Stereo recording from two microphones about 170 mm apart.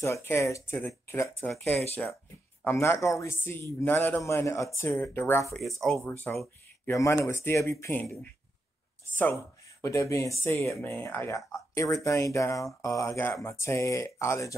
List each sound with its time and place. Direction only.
0.0 s speech: 15° left (ahead or behind)
1.5 s speech: centre (ahead or behind)
2.6 s speech: 15° left (ahead or behind)
5.6 s speech: centre (ahead or behind); by 14.5 s 15° left (ahead or behind)